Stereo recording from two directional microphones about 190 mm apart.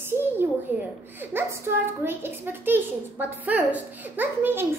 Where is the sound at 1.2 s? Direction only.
10° right (ahead or behind).